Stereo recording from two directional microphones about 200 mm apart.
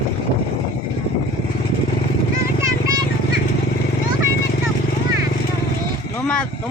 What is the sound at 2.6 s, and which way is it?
Vehicle, 15° right (ahead or behind).